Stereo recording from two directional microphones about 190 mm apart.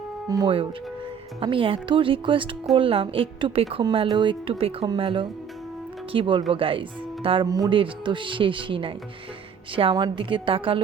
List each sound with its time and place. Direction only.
0.3 s a woman's voice: 20° right (ahead or behind)